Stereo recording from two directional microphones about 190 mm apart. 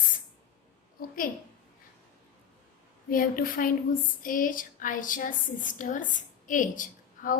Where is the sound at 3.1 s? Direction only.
50° left (ahead or behind).